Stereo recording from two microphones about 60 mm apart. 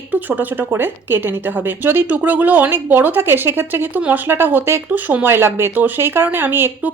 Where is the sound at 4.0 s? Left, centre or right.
Right.